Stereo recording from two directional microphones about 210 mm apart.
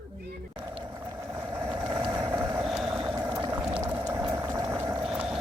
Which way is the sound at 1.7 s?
20° right (ahead or behind).